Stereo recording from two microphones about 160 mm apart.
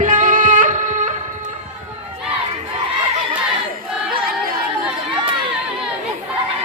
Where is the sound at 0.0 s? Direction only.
55° right (ahead or behind).